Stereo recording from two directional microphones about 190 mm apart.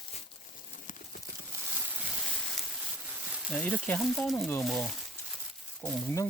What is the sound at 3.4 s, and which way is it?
Speech, 5° left (ahead or behind).